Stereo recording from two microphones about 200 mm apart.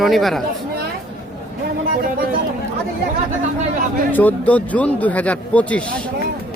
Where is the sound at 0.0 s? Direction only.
Centre (ahead or behind).